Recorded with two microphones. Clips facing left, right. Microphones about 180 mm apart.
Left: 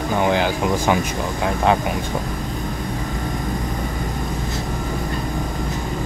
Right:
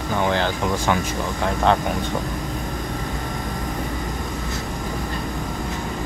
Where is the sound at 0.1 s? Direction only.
15° left (ahead or behind).